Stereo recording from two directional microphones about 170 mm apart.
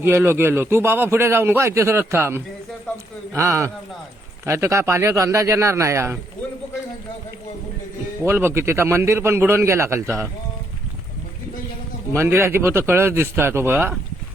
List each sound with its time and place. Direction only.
0.0 s a man's voice: 10° right (ahead or behind)
8.2 s a man's voice: 15° right (ahead or behind)
12.1 s a man's voice: 15° right (ahead or behind)